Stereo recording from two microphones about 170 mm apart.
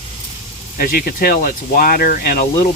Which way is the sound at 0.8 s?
60° left (ahead or behind).